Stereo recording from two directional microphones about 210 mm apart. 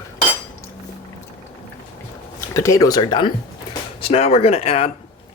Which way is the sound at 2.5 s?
15° left (ahead or behind).